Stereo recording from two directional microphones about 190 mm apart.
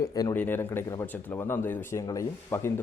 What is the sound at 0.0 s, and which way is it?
Speech, 20° left (ahead or behind).